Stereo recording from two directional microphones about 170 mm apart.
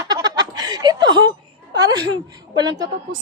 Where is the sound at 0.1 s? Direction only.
25° right (ahead or behind).